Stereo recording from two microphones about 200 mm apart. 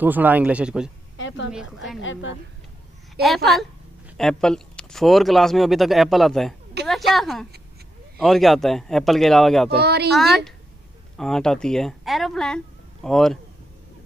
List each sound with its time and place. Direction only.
0.0 s speech: 10° right (ahead or behind)
1.1 s a sound: 65° left (ahead or behind)
1.5 s speech: 5° right (ahead or behind)
2.0 s a woman's voice: 70° left (ahead or behind)
3.2 s speech: centre (ahead or behind)
9.8 s speech: 55° right (ahead or behind)
10.1 s speech: centre (ahead or behind)